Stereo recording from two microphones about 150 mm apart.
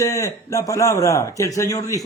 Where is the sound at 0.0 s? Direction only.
20° left (ahead or behind).